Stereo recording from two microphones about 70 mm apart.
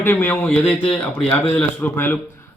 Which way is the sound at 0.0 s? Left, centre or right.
Left.